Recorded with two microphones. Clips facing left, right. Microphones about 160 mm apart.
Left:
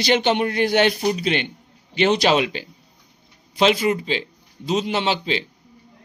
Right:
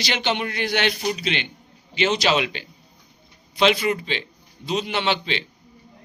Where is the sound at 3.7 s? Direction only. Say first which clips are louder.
Left 3 dB; 25° left (ahead or behind).